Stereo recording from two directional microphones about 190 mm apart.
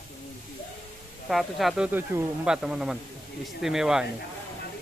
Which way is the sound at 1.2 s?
Centre (ahead or behind).